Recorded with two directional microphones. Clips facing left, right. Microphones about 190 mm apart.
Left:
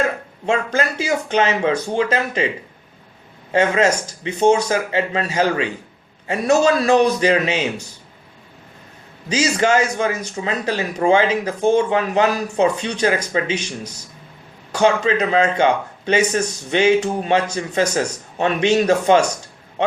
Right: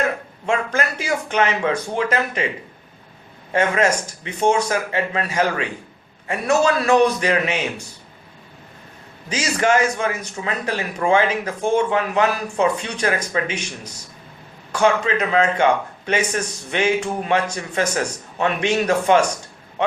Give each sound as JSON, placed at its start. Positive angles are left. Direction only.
{"t": 0.4, "sound": "speech", "side_deg": 30}
{"t": 3.5, "sound": "speech", "side_deg": 30}
{"t": 9.3, "sound": "speech", "side_deg": 30}
{"t": 14.7, "sound": "speech", "side_deg": 35}